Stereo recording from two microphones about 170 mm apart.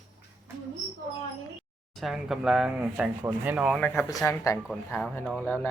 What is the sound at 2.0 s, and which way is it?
Speech, centre (ahead or behind).